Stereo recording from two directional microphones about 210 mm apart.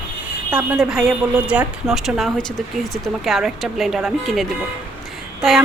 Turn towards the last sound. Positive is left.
turn(degrees=0)  # may be behind; listen again after turning